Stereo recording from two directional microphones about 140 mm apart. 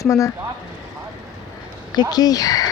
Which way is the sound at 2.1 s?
30° left (ahead or behind).